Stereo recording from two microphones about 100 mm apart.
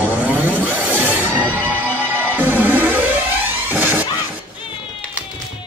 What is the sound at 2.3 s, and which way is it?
Music, 20° right (ahead or behind).